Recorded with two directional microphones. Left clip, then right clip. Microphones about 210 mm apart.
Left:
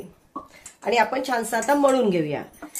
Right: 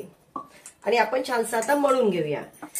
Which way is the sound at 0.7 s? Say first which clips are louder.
Left 1 dB; 40° left (ahead or behind).